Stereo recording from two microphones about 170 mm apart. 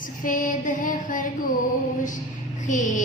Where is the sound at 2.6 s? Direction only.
45° left (ahead or behind).